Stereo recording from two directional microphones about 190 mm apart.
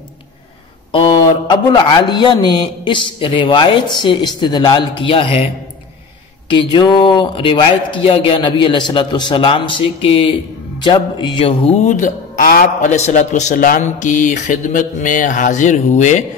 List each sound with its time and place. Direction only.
0.9 s a man's voice: 25° left (ahead or behind)
6.5 s a man's voice: 25° left (ahead or behind); by 16.3 s 40° left (ahead or behind)